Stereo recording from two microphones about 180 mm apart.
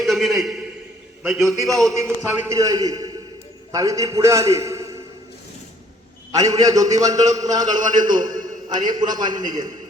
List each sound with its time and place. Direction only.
0.0 s a sound: centre (ahead or behind)
1.2 s a man's voice: centre (ahead or behind)
2.2 s a man's voice: 15° right (ahead or behind)
6.3 s a man's voice: 20° right (ahead or behind)